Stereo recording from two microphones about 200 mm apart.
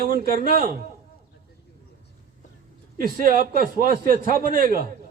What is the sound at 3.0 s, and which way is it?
A man's voice, 45° right (ahead or behind).